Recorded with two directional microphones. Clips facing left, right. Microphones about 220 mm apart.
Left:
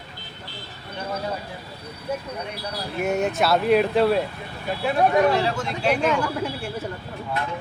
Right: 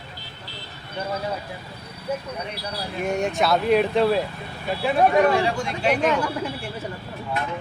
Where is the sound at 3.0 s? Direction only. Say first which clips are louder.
Left 1 dB; 5° left (ahead or behind).